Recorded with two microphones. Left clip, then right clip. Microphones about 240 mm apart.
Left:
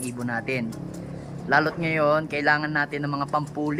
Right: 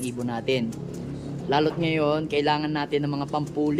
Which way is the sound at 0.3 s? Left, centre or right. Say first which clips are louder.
Right 1 dB; centre.